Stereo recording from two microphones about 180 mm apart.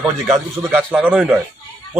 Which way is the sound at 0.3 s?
5° right (ahead or behind).